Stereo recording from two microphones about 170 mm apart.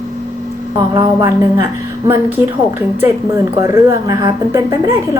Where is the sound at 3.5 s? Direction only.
20° right (ahead or behind).